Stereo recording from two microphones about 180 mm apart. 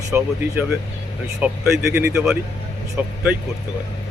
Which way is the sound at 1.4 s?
10° right (ahead or behind).